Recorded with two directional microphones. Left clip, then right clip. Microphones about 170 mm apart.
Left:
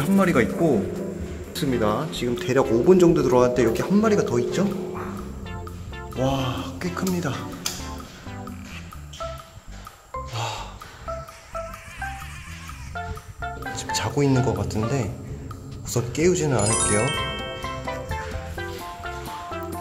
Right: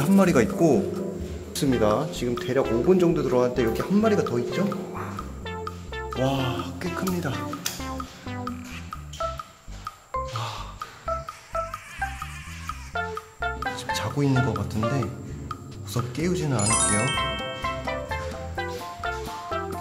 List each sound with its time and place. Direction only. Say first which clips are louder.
0.0 s a man's voice: even; 15° right (ahead or behind)
2.3 s speech: left 4 dB; 10° left (ahead or behind)
4.4 s speech: left 3 dB; 15° left (ahead or behind)
4.9 s music: left 1 dB; centre (ahead or behind)
10.3 s music: left 3 dB; 15° left (ahead or behind)
11.1 s music: right 3 dB; centre (ahead or behind)
13.7 s music: left 3 dB; 15° left (ahead or behind)
14.6 s speech: left 1 dB; 15° left (ahead or behind)
16.5 s music: left 2 dB; centre (ahead or behind)